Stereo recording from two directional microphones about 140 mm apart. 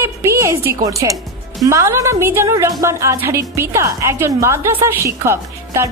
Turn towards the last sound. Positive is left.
turn(degrees=-20)  # may be behind; listen again after turning